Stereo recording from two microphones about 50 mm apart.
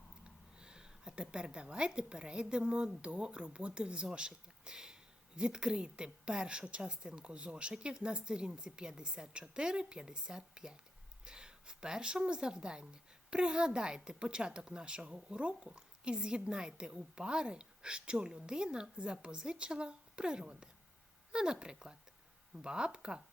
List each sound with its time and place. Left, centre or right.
0.3 s a woman's voice: centre